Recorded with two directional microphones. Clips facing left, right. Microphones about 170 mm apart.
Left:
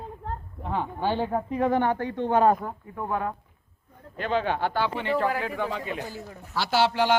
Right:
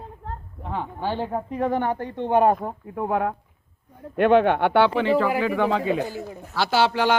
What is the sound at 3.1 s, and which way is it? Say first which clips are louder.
Speech: right 4 dB; 60° right (ahead or behind).